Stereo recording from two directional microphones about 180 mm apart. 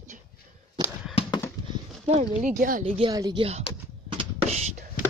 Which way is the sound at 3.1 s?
20° right (ahead or behind).